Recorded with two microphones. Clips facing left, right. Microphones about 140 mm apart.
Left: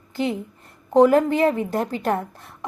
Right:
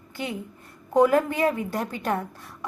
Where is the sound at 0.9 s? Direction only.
25° left (ahead or behind).